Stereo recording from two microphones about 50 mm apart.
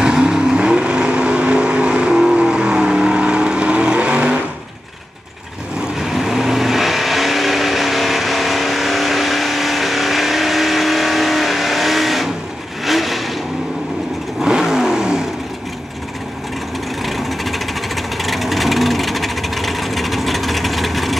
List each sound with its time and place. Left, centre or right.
0.0 s vehicle: centre
5.9 s vehicle: centre
14.4 s vehicle: centre
17.0 s a sound: centre